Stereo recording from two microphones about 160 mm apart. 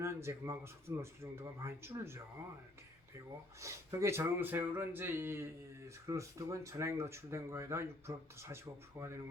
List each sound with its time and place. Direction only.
0.0 s speech: 15° right (ahead or behind)
3.6 s speech: 15° right (ahead or behind)